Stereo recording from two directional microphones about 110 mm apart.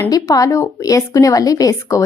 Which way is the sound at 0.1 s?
35° left (ahead or behind).